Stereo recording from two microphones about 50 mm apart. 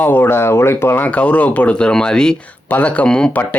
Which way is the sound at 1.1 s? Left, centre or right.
Left.